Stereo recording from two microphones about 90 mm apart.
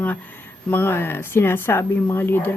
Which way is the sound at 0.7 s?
25° left (ahead or behind).